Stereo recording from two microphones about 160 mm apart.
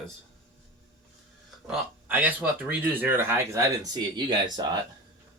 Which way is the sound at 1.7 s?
10° right (ahead or behind).